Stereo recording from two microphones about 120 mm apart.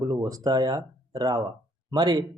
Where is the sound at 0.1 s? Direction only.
30° right (ahead or behind).